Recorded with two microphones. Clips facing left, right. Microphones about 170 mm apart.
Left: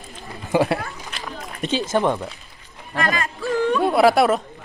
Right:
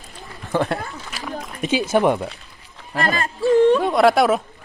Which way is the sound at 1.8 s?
10° right (ahead or behind).